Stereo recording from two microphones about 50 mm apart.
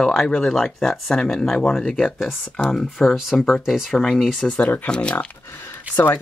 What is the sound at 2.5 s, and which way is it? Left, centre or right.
Speech, centre.